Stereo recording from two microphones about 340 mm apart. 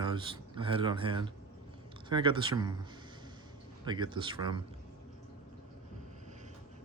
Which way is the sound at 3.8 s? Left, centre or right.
Centre.